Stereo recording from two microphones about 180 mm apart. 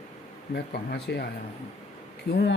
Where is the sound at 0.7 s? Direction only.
60° left (ahead or behind).